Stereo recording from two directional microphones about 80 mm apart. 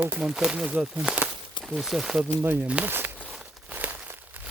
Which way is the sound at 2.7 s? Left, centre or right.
Centre.